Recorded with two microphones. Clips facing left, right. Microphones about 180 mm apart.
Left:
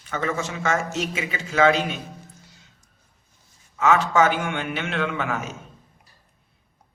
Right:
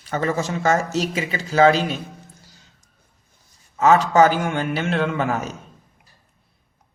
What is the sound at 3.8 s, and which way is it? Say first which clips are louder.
A man's voice: right 4 dB; 35° right (ahead or behind).